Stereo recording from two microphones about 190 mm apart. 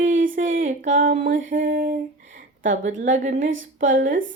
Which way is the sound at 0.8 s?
45° right (ahead or behind).